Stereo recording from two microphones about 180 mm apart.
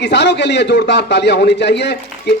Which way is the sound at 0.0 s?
75° left (ahead or behind).